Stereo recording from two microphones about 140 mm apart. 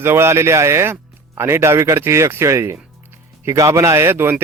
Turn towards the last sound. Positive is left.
turn(degrees=-15)  # may be behind; listen again after turning